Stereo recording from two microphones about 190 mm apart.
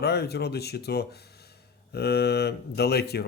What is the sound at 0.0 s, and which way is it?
Speech, 60° left (ahead or behind).